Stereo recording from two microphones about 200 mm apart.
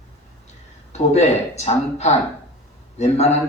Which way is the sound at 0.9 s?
35° left (ahead or behind).